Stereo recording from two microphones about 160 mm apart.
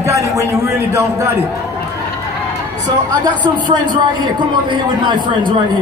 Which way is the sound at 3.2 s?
30° right (ahead or behind).